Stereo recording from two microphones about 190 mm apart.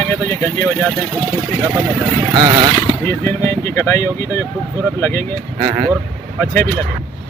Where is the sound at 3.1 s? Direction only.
15° left (ahead or behind).